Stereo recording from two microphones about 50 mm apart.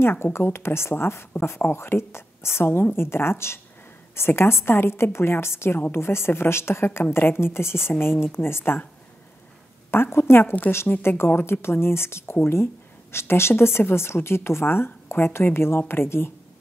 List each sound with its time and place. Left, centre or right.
0.0 s a woman's voice: left
10.1 s a woman's voice: left